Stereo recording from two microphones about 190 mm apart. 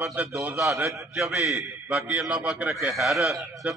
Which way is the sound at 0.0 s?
10° right (ahead or behind).